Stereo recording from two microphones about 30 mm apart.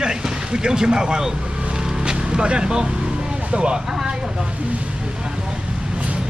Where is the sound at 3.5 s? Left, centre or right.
Right.